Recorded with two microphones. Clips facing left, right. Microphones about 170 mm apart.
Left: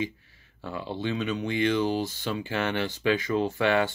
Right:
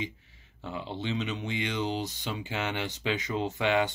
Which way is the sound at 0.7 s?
20° right (ahead or behind).